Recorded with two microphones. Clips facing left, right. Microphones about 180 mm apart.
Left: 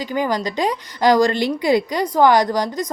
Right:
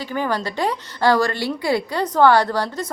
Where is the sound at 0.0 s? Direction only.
15° left (ahead or behind).